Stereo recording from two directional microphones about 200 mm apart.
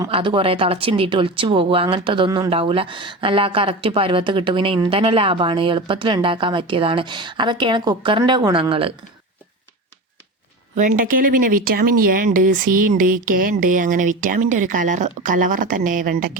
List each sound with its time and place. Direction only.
0.1 s speech: 25° right (ahead or behind)
10.8 s speech: 40° right (ahead or behind)